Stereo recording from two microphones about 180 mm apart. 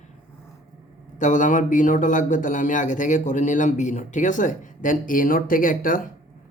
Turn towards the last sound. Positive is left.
turn(degrees=50)  # may be behind; listen again after turning